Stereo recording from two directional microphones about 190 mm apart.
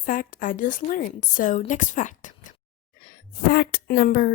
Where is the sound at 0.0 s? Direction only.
45° left (ahead or behind).